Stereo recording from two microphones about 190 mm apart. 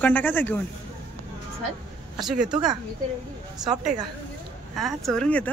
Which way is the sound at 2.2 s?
Centre (ahead or behind).